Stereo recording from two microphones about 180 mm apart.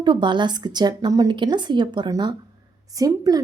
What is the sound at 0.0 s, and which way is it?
A woman's voice, 25° right (ahead or behind).